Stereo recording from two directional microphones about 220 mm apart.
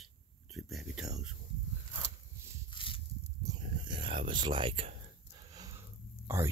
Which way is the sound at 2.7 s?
25° left (ahead or behind).